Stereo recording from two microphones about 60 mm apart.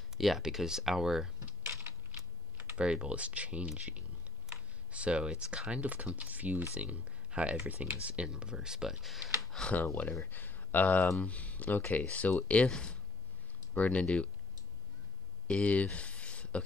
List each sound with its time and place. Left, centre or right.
0.2 s speech: centre
1.6 s typing: right
2.7 s speech: centre
4.5 s computer keyboard: centre
5.7 s speech: right; by 9.6 s centre
10.2 s speech: left
12.6 s speech: centre
13.7 s speech: left
15.4 s a sound: left